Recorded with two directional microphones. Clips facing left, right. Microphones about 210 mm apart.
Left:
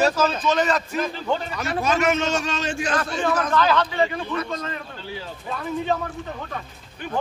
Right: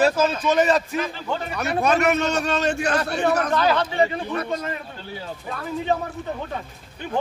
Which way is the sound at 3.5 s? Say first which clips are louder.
Even; 35° right (ahead or behind).